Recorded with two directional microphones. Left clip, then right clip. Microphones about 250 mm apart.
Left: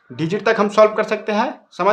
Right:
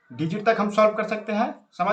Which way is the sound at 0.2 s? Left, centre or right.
Left.